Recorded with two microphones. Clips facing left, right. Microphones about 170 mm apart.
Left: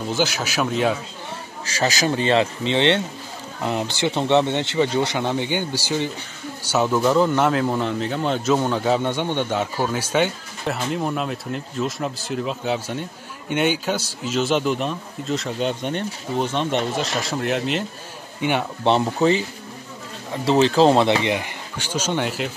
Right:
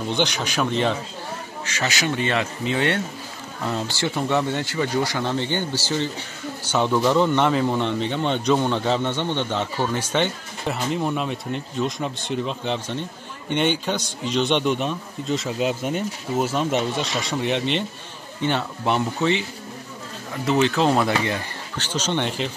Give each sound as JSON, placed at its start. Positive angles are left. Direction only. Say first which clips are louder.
{"t": 0.1, "sound": "a man's voice", "louder": "left 1 dB", "side_deg": 5}
{"t": 1.7, "sound": "a man's voice", "louder": "left 4 dB", "side_deg": 35}
{"t": 18.4, "sound": "speech", "louder": "left 1 dB", "side_deg": 15}
{"t": 18.9, "sound": "speech", "louder": "left 4 dB", "side_deg": 35}
{"t": 20.4, "sound": "speech", "louder": "left 4 dB", "side_deg": 30}